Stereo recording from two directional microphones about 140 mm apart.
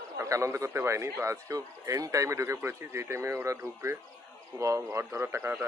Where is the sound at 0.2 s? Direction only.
20° right (ahead or behind).